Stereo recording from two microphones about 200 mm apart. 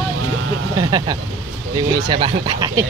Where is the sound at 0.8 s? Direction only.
20° right (ahead or behind).